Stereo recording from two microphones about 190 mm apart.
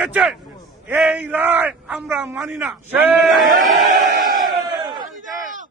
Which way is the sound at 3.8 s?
50° right (ahead or behind).